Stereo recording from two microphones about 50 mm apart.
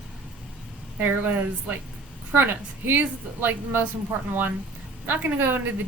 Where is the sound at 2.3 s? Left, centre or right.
Right.